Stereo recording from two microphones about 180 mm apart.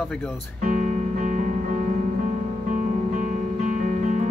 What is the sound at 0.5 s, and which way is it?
Music, 45° right (ahead or behind).